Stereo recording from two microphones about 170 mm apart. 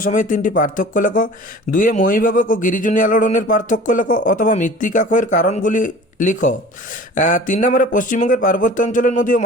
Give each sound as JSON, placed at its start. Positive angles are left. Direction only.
{"t": 0.0, "sound": "speech", "side_deg": 50}